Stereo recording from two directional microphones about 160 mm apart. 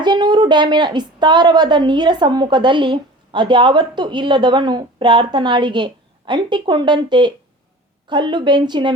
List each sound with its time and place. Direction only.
0.0 s a woman's voice: 25° right (ahead or behind)